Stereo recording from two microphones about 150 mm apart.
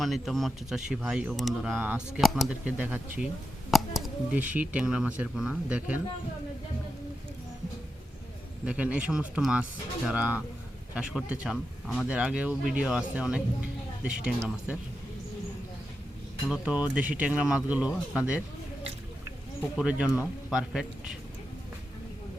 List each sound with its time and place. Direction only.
0.0 s speech: centre (ahead or behind)
8.6 s speech: 10° right (ahead or behind)
16.5 s speech: 10° right (ahead or behind)
19.7 s speech: 5° right (ahead or behind)